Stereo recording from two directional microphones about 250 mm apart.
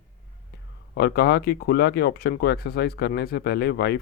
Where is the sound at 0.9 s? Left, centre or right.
Left.